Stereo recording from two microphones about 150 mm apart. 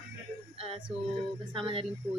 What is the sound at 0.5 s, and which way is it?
Speech, 40° right (ahead or behind).